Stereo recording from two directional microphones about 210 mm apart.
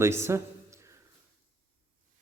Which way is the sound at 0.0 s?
10° right (ahead or behind).